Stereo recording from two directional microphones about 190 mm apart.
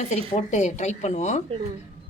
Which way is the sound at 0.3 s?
40° left (ahead or behind).